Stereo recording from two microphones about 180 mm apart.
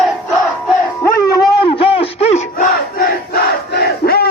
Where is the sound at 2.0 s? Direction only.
45° left (ahead or behind).